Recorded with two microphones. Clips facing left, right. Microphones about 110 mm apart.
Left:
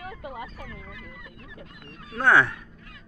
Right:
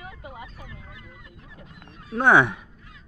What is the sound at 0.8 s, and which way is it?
Goose, 65° left (ahead or behind).